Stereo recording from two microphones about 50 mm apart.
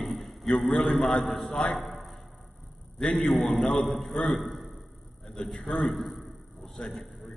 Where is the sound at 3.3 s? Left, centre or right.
Centre.